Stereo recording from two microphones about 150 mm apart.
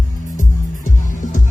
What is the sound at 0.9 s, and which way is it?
Music, 60° left (ahead or behind).